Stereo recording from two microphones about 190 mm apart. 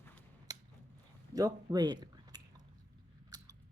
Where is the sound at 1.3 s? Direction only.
20° right (ahead or behind).